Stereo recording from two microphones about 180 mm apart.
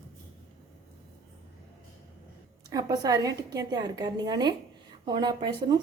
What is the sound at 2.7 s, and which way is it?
A woman's voice, 20° right (ahead or behind).